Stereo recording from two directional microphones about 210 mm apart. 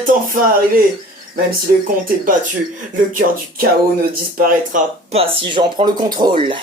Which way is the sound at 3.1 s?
40° right (ahead or behind).